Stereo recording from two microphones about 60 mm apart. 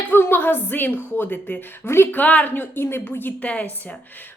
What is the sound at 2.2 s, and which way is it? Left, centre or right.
A woman's voice, left.